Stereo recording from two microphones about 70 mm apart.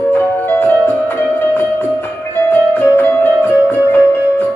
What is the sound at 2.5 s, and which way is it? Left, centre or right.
Music, left.